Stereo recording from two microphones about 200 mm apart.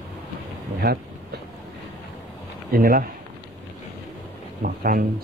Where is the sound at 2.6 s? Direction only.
45° right (ahead or behind).